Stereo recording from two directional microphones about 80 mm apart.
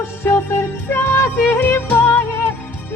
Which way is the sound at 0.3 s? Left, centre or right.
Left.